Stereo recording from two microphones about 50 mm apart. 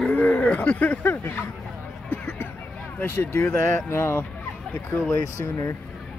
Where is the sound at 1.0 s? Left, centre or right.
Left.